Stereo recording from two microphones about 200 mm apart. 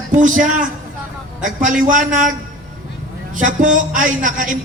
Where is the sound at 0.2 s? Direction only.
40° right (ahead or behind).